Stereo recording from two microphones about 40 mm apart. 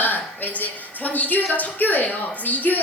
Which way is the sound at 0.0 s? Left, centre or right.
Left.